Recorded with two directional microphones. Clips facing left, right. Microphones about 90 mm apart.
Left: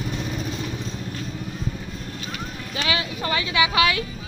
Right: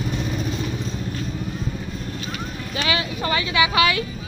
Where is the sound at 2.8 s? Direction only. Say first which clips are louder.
Right 2 dB; 60° right (ahead or behind).